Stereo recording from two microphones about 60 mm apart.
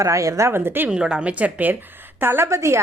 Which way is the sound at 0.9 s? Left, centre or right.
Centre.